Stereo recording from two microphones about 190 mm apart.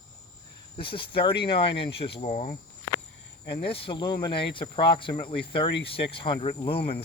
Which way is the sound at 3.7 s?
30° left (ahead or behind).